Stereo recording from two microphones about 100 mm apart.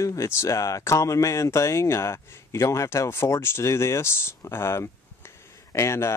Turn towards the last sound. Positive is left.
turn(degrees=25)  # may be behind; listen again after turning